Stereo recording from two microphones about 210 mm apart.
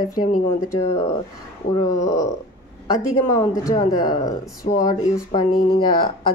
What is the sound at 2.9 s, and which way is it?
A woman's voice, 15° left (ahead or behind).